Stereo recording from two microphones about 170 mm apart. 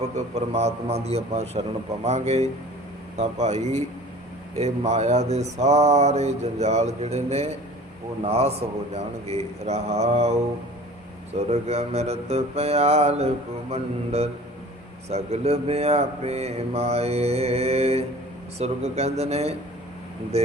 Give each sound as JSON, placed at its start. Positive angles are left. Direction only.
{"t": 0.3, "sound": "mantra", "side_deg": -40}
{"t": 3.2, "sound": "speech", "side_deg": -40}
{"t": 4.5, "sound": "mantra", "side_deg": -40}
{"t": 11.3, "sound": "mantra", "side_deg": -40}